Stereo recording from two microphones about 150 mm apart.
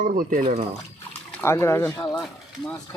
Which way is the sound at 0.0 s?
65° right (ahead or behind).